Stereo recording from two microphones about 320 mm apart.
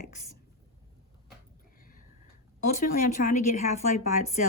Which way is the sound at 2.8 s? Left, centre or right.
Left.